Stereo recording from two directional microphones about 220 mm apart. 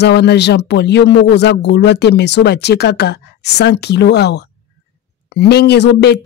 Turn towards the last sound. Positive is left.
turn(degrees=50)  # may be behind; listen again after turning